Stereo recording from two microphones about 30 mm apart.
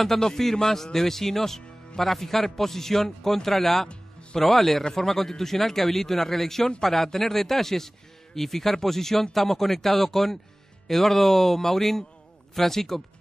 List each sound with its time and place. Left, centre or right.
0.2 s a man's voice: centre